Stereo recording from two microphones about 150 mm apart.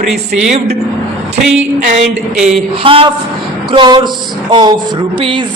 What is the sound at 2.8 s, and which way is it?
A woman's voice, 35° right (ahead or behind).